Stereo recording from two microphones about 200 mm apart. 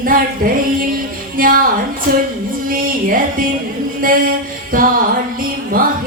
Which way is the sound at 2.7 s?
45° right (ahead or behind).